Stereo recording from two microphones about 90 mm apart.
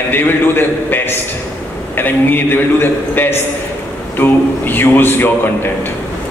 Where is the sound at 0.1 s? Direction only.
25° left (ahead or behind).